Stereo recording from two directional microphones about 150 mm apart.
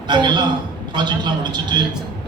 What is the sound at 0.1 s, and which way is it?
A man's voice, 30° right (ahead or behind).